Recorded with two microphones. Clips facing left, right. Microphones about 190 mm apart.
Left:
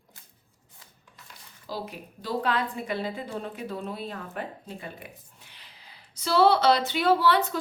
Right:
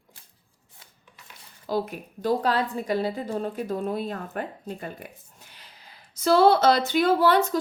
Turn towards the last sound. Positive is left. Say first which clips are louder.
# right 2 dB
turn(degrees=-45)  # may be behind; listen again after turning